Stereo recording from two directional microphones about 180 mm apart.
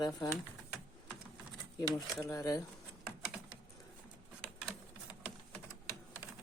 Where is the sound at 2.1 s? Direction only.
20° left (ahead or behind).